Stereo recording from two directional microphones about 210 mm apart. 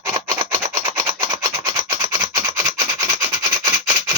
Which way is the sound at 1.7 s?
20° right (ahead or behind).